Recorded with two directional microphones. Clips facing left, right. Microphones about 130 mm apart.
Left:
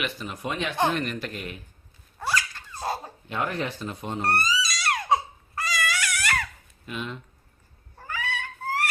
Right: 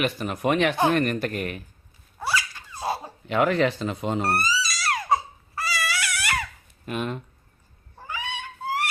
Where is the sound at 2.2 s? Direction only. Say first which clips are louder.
Right 1 dB; 10° right (ahead or behind).